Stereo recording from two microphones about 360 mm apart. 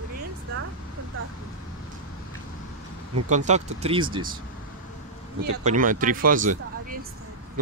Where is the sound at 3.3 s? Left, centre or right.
Centre.